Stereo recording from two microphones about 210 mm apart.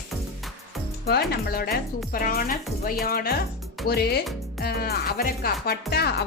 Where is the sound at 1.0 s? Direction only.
50° left (ahead or behind).